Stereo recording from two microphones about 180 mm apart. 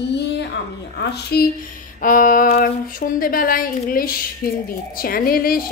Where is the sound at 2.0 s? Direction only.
50° left (ahead or behind).